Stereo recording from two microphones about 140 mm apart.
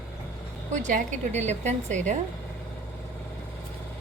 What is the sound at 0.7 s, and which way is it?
A woman's voice, 60° right (ahead or behind).